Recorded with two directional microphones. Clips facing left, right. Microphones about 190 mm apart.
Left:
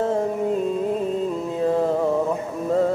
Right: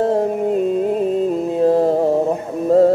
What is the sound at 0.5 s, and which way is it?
Music, 60° right (ahead or behind).